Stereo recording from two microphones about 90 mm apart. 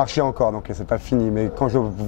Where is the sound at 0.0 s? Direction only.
15° left (ahead or behind).